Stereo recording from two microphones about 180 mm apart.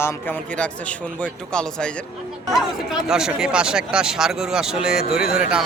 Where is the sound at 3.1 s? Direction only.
5° right (ahead or behind).